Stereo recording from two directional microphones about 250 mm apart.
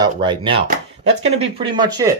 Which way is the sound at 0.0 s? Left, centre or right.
Centre.